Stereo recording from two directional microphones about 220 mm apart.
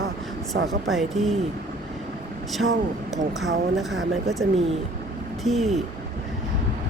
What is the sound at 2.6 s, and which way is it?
Speech, 60° right (ahead or behind).